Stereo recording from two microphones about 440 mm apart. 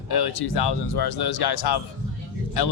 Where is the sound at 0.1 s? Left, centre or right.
Left.